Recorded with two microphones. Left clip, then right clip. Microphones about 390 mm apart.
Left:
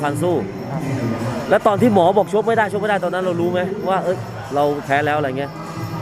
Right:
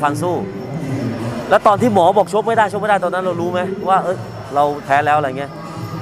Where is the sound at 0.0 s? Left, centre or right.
Right.